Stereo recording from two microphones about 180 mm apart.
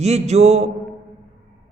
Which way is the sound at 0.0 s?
35° right (ahead or behind).